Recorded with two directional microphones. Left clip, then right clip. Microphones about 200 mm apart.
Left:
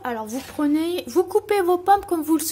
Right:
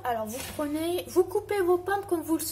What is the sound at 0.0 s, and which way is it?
A woman's voice, 50° left (ahead or behind).